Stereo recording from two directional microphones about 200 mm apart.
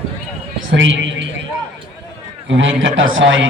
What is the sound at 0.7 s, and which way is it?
Speech, 65° right (ahead or behind).